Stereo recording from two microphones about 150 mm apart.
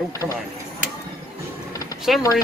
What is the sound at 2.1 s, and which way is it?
Speech, centre (ahead or behind).